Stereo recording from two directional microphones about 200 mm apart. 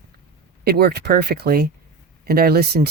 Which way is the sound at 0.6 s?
50° right (ahead or behind).